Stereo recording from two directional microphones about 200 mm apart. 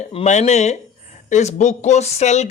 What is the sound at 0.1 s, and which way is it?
Speech, 35° left (ahead or behind).